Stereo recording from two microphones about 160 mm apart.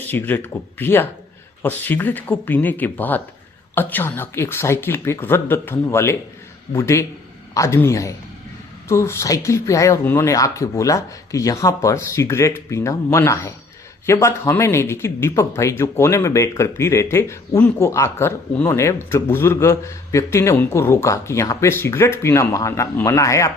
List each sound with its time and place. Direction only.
0.1 s speech: 10° left (ahead or behind)